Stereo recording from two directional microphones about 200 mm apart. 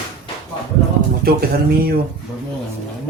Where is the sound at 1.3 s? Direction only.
50° right (ahead or behind).